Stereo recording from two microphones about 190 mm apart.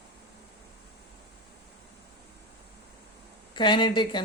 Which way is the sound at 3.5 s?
25° left (ahead or behind).